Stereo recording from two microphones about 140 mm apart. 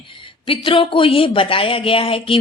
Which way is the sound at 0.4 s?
40° left (ahead or behind).